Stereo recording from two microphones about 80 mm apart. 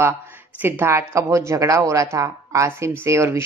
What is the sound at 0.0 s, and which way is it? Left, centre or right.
Speech, right.